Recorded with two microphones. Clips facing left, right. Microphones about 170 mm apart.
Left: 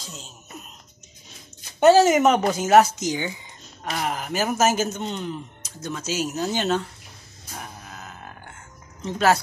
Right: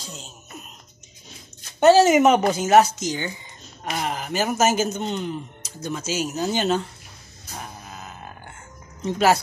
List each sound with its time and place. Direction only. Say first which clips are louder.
1.8 s a man's voice: right 1 dB; centre (ahead or behind)
5.8 s speech: right 2 dB; 15° right (ahead or behind)
6.0 s a man's voice: even; centre (ahead or behind)
7.5 s a sound: right 1 dB; 5° right (ahead or behind)
9.0 s speech: right 1 dB; 10° right (ahead or behind)